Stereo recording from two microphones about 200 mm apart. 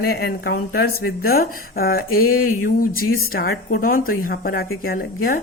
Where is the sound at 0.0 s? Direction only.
50° left (ahead or behind).